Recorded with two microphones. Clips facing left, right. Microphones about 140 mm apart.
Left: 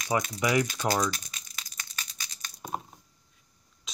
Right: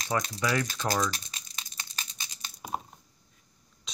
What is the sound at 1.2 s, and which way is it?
Crushing, 25° right (ahead or behind).